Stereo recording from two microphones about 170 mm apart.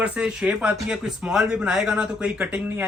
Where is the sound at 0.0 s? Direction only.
5° right (ahead or behind).